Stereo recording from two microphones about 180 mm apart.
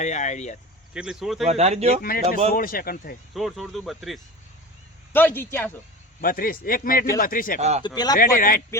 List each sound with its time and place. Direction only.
0.0 s speech: 40° left (ahead or behind)
0.9 s speech: 5° right (ahead or behind)
1.5 s speech: 35° right (ahead or behind)
2.0 s a man's voice: 55° left (ahead or behind)
3.3 s speech: centre (ahead or behind)
5.1 s a man's voice: 10° left (ahead or behind)
6.2 s a man's voice: 50° left (ahead or behind)
7.9 s speech: 20° left (ahead or behind)
8.1 s a man's voice: 50° left (ahead or behind)